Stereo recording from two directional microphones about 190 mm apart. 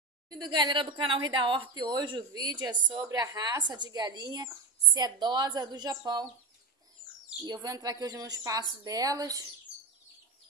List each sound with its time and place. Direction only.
0.3 s speech: 20° right (ahead or behind)
7.4 s speech: 20° right (ahead or behind)